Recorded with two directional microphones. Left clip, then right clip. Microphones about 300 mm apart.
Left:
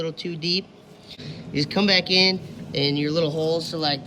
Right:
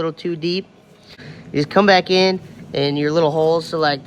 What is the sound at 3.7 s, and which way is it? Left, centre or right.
Speech, right.